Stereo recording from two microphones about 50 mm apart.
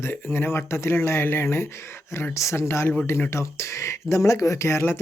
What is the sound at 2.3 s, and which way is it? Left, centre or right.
Speech, left.